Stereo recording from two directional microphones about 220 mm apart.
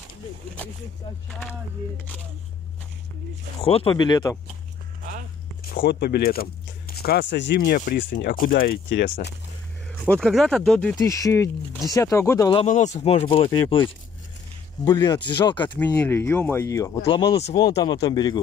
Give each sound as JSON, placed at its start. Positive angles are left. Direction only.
{"t": 3.6, "sound": "speech", "side_deg": 25}
{"t": 5.6, "sound": "speech", "side_deg": 45}
{"t": 10.1, "sound": "speech", "side_deg": 5}
{"t": 11.0, "sound": "speech", "side_deg": 15}
{"t": 12.6, "sound": "speech", "side_deg": 35}
{"t": 14.9, "sound": "speech", "side_deg": 20}
{"t": 15.8, "sound": "speech", "side_deg": 10}